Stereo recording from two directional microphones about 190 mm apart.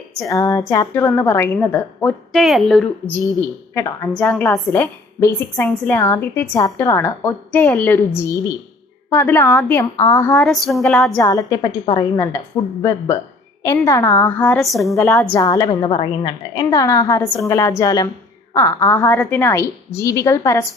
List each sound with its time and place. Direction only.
0.2 s a woman's voice: 15° left (ahead or behind)
2.3 s a woman's voice: centre (ahead or behind)
3.3 s a woman's voice: 15° left (ahead or behind)
10.4 s a woman's voice: centre (ahead or behind)
11.2 s a woman's voice: 15° left (ahead or behind); by 14.9 s centre (ahead or behind)
14.9 s a woman's voice: 15° left (ahead or behind)